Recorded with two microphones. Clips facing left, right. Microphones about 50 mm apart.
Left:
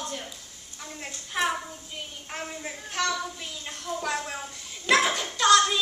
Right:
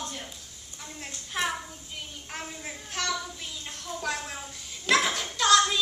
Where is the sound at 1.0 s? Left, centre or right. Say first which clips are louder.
Left 3 dB; centre.